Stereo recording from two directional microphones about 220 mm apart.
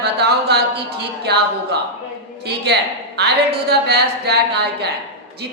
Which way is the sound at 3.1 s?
50° right (ahead or behind).